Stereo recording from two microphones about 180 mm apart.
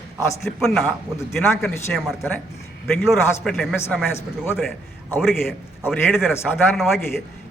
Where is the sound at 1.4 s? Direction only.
10° left (ahead or behind).